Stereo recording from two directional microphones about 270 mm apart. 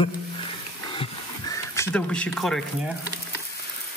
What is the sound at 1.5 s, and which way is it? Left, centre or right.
Speech, centre.